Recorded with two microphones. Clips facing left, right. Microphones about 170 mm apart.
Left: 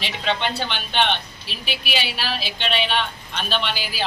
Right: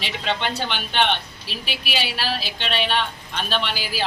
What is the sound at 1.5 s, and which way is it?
Speech, 40° right (ahead or behind).